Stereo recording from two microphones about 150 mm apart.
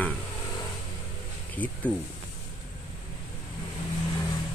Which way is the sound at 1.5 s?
10° left (ahead or behind).